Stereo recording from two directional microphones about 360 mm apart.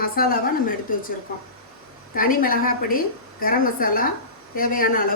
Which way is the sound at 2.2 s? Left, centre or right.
Left.